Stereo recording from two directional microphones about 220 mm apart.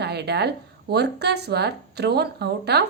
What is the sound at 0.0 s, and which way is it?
A woman's voice, 50° right (ahead or behind).